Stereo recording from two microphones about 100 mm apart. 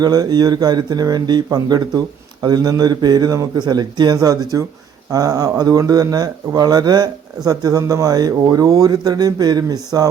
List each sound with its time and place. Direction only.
0.0 s speech: 40° right (ahead or behind)